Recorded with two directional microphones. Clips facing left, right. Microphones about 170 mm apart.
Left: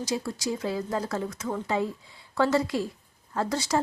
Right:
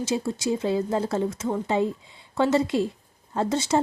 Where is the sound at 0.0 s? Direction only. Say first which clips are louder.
Right 4 dB; 25° right (ahead or behind).